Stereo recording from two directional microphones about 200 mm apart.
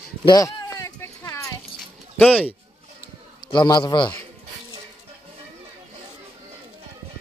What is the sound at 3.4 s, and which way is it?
Speech, 20° left (ahead or behind).